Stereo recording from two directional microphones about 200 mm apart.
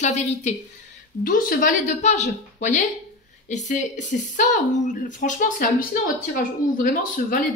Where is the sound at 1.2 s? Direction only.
45° left (ahead or behind).